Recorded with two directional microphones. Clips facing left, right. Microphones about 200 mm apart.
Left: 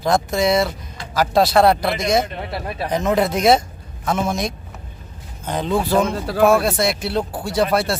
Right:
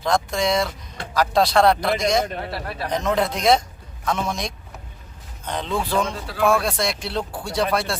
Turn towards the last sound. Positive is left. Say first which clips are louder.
# left 4 dB
turn(degrees=5)  # may be behind; listen again after turning